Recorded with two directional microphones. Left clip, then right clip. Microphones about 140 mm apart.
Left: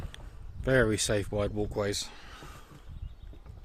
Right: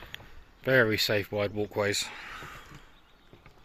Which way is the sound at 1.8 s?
30° left (ahead or behind).